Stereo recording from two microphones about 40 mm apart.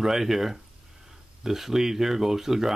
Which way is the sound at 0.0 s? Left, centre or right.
Centre.